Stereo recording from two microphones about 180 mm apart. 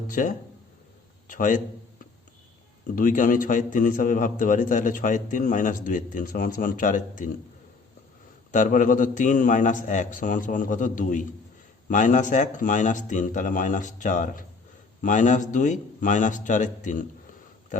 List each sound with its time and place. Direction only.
0.1 s a man's voice: 50° left (ahead or behind)
2.8 s a man's voice: 50° left (ahead or behind)
8.5 s a man's voice: 45° left (ahead or behind)
17.7 s a sound: 45° left (ahead or behind)